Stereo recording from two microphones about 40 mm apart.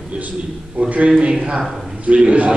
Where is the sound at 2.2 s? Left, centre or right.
Right.